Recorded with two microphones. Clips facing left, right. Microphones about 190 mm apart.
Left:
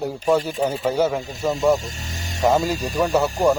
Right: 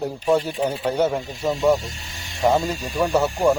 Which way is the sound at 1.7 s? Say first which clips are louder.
Left 2 dB; 45° left (ahead or behind).